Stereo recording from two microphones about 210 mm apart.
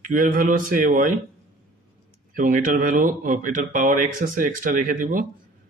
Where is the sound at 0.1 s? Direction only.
40° right (ahead or behind).